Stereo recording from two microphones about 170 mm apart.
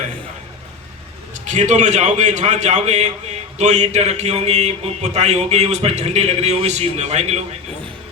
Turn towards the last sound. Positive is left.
turn(degrees=-40)  # may be behind; listen again after turning